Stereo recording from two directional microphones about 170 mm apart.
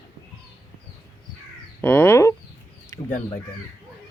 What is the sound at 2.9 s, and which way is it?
Bird, 15° left (ahead or behind).